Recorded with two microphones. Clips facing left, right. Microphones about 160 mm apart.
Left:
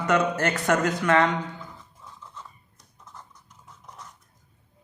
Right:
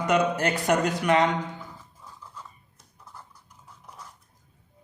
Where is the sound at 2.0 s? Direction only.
10° right (ahead or behind).